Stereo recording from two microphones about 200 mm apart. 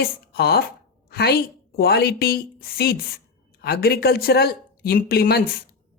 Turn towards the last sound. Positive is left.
turn(degrees=50)  # may be behind; listen again after turning